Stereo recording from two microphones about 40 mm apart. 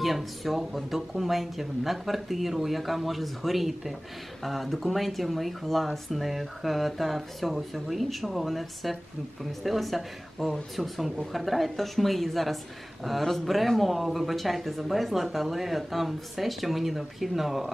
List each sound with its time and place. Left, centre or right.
0.0 s speech: centre